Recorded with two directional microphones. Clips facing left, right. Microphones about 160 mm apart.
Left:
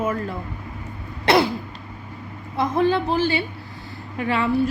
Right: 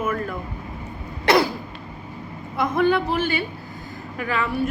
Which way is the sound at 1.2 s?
25° left (ahead or behind).